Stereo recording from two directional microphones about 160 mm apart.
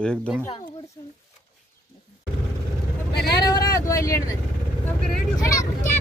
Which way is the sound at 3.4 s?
25° left (ahead or behind).